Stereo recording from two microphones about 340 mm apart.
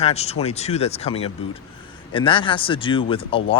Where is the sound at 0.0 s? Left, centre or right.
Centre.